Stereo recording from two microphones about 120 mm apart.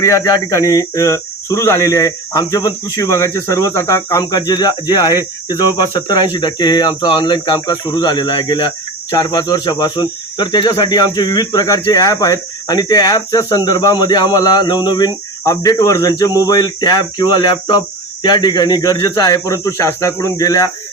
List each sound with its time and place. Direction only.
0.0 s cricket: 25° left (ahead or behind)